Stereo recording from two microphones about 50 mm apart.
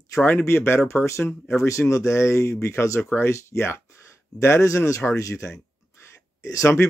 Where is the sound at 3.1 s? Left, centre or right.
Left.